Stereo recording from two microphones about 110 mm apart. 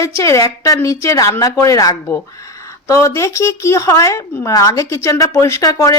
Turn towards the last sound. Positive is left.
turn(degrees=30)  # may be behind; listen again after turning